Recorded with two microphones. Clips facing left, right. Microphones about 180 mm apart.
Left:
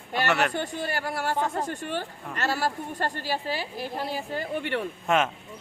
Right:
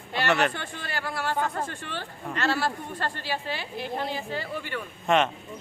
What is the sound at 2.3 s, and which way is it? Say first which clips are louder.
A woman's voice: right 1 dB; 40° left (ahead or behind).